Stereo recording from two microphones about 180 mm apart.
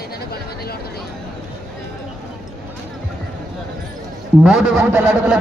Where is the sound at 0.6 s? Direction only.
60° left (ahead or behind).